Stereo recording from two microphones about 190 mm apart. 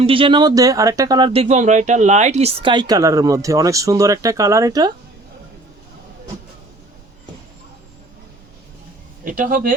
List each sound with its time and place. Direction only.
0.0 s speech: 30° right (ahead or behind)
9.2 s speech: 45° right (ahead or behind)